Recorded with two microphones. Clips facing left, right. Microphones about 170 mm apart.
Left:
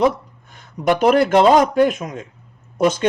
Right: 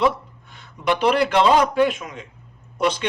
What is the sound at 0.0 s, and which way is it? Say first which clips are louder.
Speech: left 3 dB; 45° left (ahead or behind).